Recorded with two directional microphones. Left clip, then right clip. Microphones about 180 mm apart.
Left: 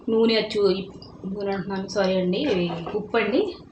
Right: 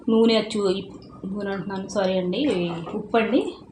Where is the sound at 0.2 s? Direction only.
25° right (ahead or behind).